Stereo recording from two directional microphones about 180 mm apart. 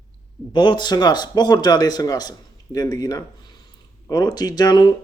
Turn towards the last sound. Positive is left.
turn(degrees=25)  # may be behind; listen again after turning